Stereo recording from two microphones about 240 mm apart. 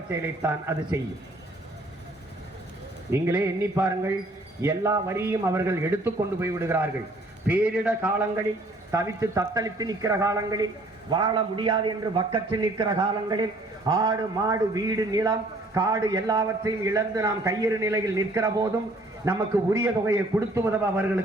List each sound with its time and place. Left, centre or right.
0.1 s a man's voice: centre
3.1 s a man's voice: centre